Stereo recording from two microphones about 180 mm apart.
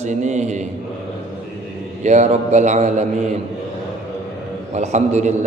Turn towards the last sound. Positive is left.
turn(degrees=-40)  # may be behind; listen again after turning